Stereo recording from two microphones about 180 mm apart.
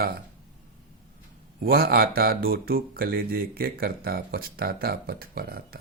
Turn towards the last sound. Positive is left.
turn(degrees=-55)  # may be behind; listen again after turning